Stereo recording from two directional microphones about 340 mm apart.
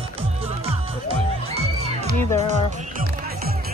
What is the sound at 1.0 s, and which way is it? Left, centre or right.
Music, centre.